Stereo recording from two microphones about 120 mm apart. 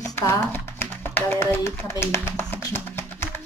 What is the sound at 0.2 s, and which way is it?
Tap, 20° left (ahead or behind).